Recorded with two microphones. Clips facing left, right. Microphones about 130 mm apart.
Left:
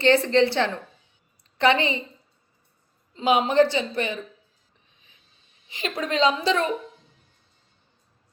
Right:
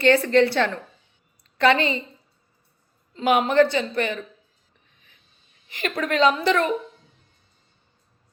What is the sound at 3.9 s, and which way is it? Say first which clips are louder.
Speech: right 2 dB; 55° right (ahead or behind).